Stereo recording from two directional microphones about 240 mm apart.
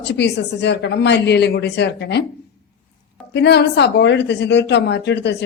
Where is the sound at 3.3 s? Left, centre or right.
Left.